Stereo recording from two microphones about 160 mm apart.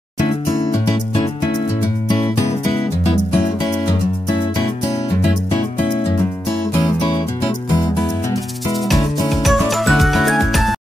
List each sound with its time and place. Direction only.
6.8 s music: 25° left (ahead or behind)
9.3 s music: centre (ahead or behind)